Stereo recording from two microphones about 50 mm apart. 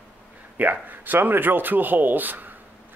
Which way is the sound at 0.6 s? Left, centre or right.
Right.